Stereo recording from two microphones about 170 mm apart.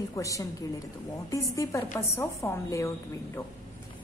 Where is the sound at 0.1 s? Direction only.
20° left (ahead or behind).